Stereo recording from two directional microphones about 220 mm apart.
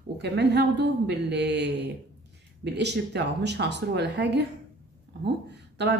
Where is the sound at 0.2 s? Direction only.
50° right (ahead or behind).